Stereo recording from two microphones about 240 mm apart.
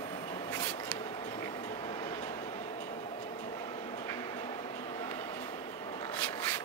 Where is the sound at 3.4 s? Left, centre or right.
Centre.